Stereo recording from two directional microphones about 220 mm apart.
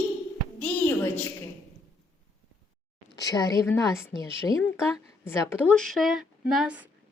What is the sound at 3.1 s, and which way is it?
Speech, 15° left (ahead or behind).